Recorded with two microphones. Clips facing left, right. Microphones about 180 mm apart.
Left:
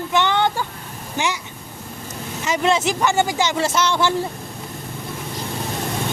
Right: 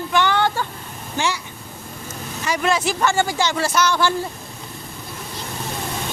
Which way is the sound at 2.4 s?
20° left (ahead or behind).